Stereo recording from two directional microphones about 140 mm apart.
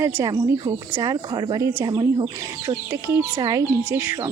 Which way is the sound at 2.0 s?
30° right (ahead or behind).